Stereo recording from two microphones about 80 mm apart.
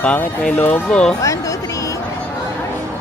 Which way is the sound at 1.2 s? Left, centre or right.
Left.